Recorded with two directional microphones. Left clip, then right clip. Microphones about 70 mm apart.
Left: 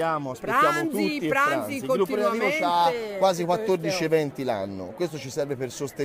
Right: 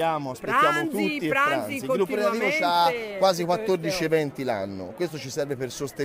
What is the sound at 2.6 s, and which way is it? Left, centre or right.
Speech, centre.